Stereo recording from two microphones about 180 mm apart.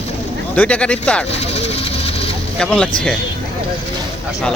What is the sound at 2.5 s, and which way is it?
Speech, 5° left (ahead or behind).